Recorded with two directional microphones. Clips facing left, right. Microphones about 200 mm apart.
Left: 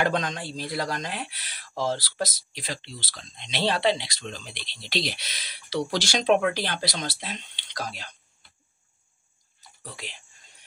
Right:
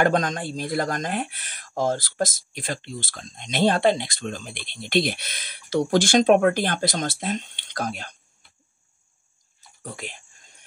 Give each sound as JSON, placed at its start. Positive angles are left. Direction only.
{"t": 0.0, "sound": "speech", "side_deg": -45}
{"t": 9.8, "sound": "speech", "side_deg": -50}